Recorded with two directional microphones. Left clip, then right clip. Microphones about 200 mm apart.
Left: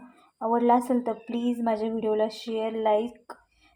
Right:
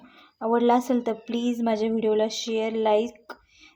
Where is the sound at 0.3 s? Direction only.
20° right (ahead or behind).